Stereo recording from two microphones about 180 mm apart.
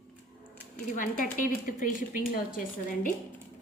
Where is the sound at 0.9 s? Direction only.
50° left (ahead or behind).